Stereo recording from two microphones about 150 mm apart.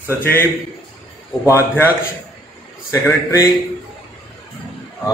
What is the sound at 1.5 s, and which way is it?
Speech, 15° left (ahead or behind).